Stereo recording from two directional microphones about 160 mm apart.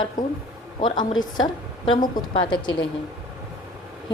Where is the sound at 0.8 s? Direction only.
30° left (ahead or behind).